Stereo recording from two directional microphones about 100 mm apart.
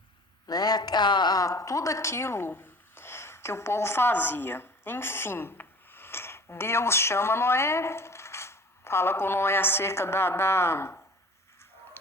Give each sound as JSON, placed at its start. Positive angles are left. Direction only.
{"t": 0.4, "sound": "speech", "side_deg": 40}